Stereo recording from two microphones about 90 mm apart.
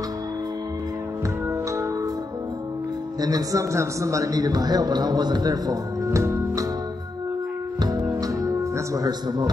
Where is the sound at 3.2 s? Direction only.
45° right (ahead or behind).